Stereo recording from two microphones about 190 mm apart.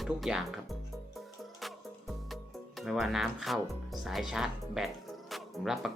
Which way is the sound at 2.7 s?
Centre (ahead or behind).